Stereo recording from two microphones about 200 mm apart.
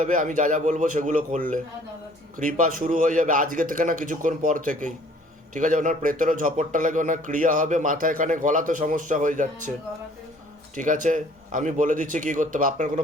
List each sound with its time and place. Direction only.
0.0 s a man's voice: 40° right (ahead or behind)
2.4 s a man's voice: 40° right (ahead or behind)
10.8 s a man's voice: 40° right (ahead or behind)